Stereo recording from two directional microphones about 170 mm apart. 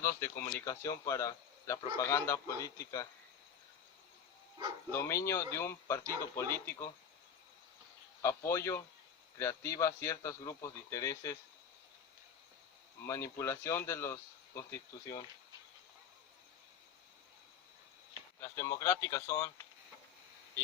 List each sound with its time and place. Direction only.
0.0 s a man's voice: 15° left (ahead or behind)
4.9 s speech: 15° left (ahead or behind)
8.2 s speech: 15° left (ahead or behind)
13.1 s speech: 15° left (ahead or behind)
18.3 s speech: 15° left (ahead or behind)